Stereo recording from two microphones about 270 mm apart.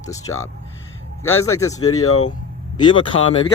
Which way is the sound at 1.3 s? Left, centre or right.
Left.